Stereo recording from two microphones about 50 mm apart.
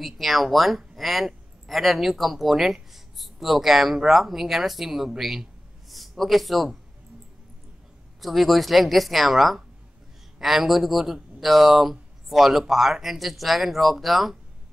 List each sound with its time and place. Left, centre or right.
0.0 s speech: centre
8.2 s speech: centre